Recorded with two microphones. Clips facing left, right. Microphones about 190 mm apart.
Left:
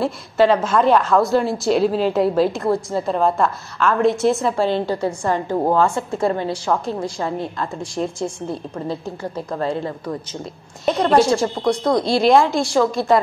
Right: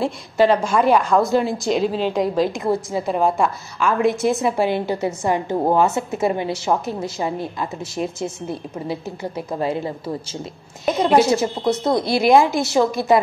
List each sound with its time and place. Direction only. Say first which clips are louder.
0.0 s a woman's voice: left 1 dB; centre (ahead or behind)
3.1 s a woman's voice: even; 10° right (ahead or behind)
7.8 s a woman's voice: left 2 dB; 5° right (ahead or behind)
12.6 s a woman's voice: even; 20° right (ahead or behind)